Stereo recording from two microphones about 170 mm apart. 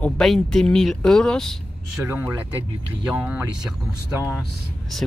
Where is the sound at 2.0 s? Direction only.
10° right (ahead or behind).